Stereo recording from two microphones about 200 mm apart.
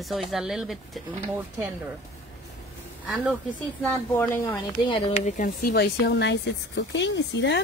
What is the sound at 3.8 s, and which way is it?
Speech, 10° left (ahead or behind).